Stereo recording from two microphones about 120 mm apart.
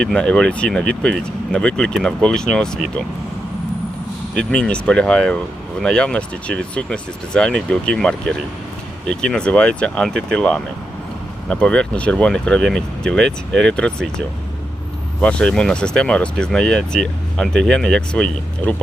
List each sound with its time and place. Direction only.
0.0 s speech: 5° left (ahead or behind)
4.4 s speech: 10° left (ahead or behind)
15.2 s speech: 10° left (ahead or behind)